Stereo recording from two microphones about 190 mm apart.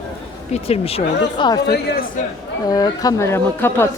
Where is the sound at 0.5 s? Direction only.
30° left (ahead or behind).